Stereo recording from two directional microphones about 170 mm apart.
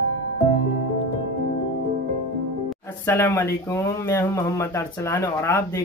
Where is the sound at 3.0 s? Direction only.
15° left (ahead or behind).